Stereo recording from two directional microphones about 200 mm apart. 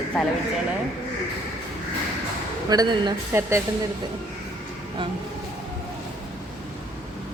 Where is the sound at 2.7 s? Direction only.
20° right (ahead or behind).